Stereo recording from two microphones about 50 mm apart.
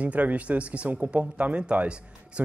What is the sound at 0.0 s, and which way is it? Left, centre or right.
Speech, right.